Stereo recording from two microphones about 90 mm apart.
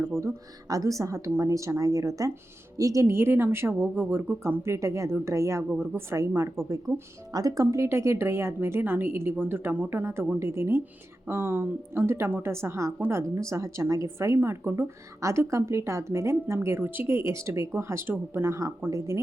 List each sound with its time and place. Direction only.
0.7 s a woman's voice: 40° right (ahead or behind)
6.9 s speech: centre (ahead or behind)
7.3 s a woman's voice: 40° right (ahead or behind)